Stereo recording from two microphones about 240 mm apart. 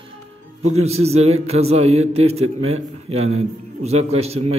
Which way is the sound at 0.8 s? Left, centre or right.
Right.